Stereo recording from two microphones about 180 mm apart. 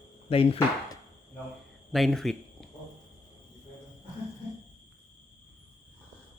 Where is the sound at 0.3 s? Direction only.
30° left (ahead or behind).